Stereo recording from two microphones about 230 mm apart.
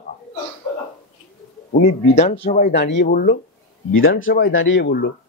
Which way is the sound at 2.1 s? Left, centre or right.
Left.